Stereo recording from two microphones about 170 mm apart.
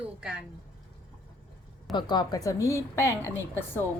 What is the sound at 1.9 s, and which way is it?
A woman's voice, 25° left (ahead or behind).